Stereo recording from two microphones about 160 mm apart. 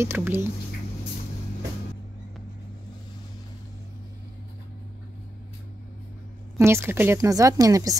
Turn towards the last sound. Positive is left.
turn(degrees=-20)  # may be behind; listen again after turning